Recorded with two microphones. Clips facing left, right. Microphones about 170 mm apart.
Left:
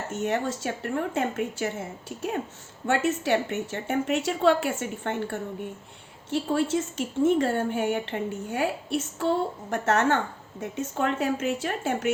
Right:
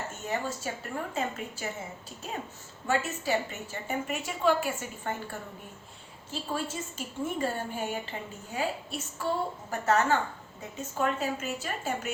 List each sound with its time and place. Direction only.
0.1 s a woman's voice: 70° left (ahead or behind)